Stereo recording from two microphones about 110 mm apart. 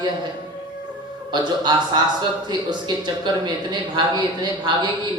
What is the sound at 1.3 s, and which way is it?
Speech, 40° right (ahead or behind).